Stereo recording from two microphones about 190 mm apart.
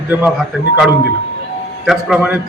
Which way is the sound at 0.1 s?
10° right (ahead or behind).